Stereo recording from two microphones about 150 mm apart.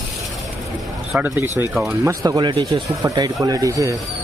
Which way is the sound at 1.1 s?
10° right (ahead or behind).